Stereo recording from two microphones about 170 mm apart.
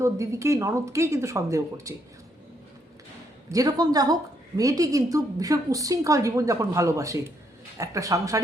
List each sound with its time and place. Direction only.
0.0 s speech: 15° right (ahead or behind)
3.5 s a woman's voice: 20° right (ahead or behind)